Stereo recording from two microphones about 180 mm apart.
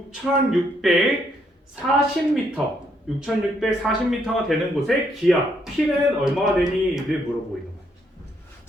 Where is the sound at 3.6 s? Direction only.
Centre (ahead or behind).